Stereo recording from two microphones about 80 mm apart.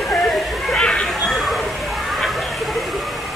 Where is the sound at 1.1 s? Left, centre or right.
Centre.